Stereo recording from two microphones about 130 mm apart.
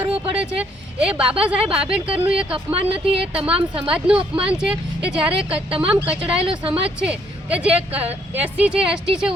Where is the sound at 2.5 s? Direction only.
45° right (ahead or behind).